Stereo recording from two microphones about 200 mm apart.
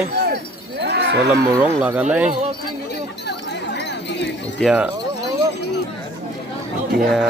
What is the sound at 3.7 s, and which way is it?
Jingle bell, 60° left (ahead or behind).